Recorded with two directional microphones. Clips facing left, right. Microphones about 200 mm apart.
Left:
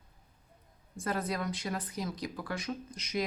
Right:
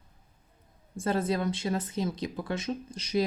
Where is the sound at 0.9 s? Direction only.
25° right (ahead or behind).